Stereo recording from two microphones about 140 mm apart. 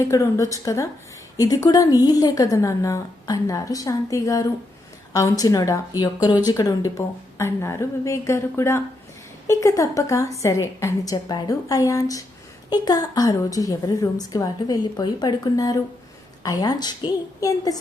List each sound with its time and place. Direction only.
0.1 s a woman's voice: 25° left (ahead or behind)